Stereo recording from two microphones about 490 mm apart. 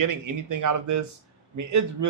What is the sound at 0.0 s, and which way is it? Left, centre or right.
Speech, right.